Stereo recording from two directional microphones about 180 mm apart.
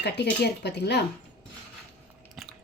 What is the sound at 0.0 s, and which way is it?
Speech, 70° left (ahead or behind).